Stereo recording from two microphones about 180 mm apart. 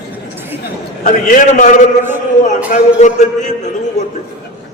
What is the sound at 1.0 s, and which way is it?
Speech, 45° left (ahead or behind).